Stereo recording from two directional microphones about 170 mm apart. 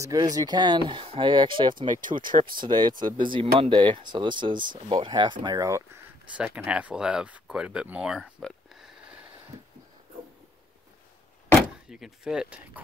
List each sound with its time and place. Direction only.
0.0 s speech: 20° right (ahead or behind)
1.9 s speech: 50° right (ahead or behind)
2.5 s speech: 25° right (ahead or behind)
6.3 s speech: 5° right (ahead or behind)
11.9 s speech: 5° right (ahead or behind)